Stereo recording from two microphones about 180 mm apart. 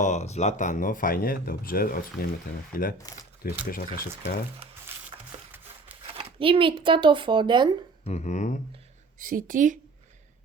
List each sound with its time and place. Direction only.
0.0 s speech: 40° left (ahead or behind)
6.1 s speech: 30° right (ahead or behind)
8.0 s a sound: 40° left (ahead or behind)
9.2 s a woman's voice: 50° right (ahead or behind)